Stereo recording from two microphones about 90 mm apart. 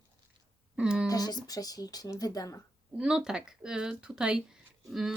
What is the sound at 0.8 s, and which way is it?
Speech, 10° right (ahead or behind).